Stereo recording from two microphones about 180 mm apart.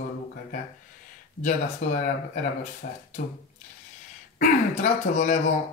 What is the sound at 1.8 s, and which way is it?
Speech, 40° left (ahead or behind).